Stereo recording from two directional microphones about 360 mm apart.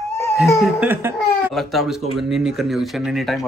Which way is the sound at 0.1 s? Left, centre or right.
Centre.